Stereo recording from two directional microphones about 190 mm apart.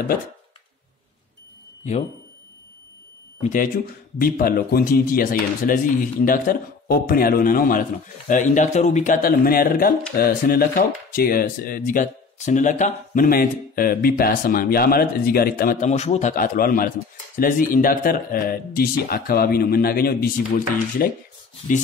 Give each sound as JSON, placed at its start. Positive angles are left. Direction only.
{"t": 1.8, "sound": "speech", "side_deg": 40}
{"t": 3.4, "sound": "speech", "side_deg": 45}